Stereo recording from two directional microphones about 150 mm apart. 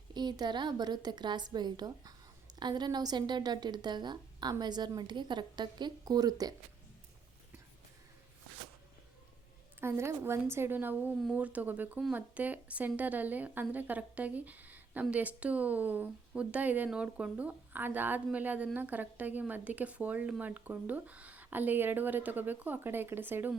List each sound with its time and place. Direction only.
0.1 s speech: 30° right (ahead or behind)
9.8 s a woman's voice: 15° right (ahead or behind)